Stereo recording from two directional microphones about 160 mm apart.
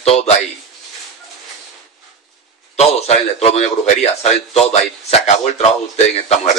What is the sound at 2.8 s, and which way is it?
A man's voice, 40° left (ahead or behind).